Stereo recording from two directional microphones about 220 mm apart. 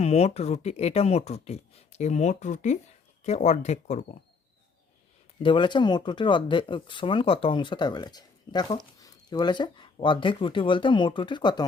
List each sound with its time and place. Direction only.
0.0 s speech: 30° left (ahead or behind)
5.4 s speech: 20° left (ahead or behind)